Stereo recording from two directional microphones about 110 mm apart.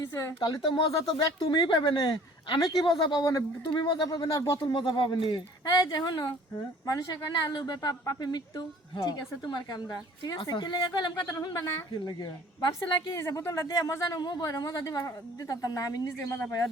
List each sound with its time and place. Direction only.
0.0 s speech: 25° left (ahead or behind)
0.3 s a woman's voice: 45° left (ahead or behind); by 3.7 s 30° left (ahead or behind)
3.8 s a woman's voice: 40° left (ahead or behind)
4.6 s a woman's voice: 45° left (ahead or behind)
13.1 s a woman's voice: 25° left (ahead or behind)
16.2 s speech: 25° left (ahead or behind)